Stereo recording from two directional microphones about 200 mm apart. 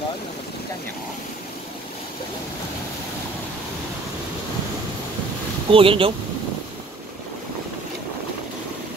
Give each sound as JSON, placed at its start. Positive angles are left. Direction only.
{"t": 5.7, "sound": "speech", "side_deg": -25}